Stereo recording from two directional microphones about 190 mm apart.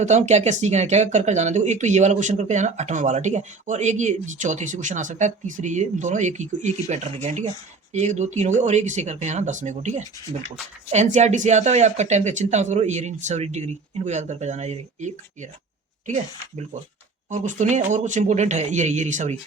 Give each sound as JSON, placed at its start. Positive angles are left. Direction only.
{"t": 0.0, "sound": "speech", "side_deg": -35}